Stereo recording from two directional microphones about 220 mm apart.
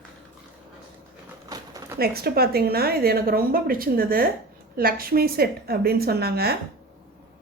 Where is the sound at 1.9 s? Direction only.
45° right (ahead or behind).